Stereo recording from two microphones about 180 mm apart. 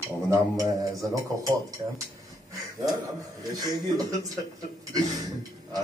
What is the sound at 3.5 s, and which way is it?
Speech, 20° right (ahead or behind).